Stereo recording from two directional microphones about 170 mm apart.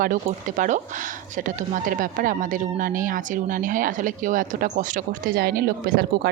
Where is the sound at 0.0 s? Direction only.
50° right (ahead or behind).